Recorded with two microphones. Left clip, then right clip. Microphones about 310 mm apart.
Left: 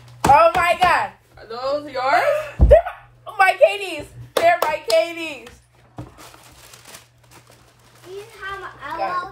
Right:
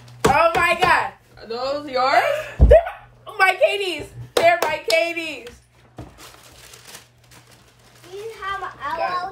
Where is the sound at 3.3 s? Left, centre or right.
Centre.